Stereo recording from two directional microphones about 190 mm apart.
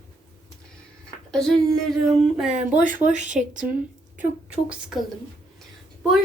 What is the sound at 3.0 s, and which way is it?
Speech, 40° right (ahead or behind).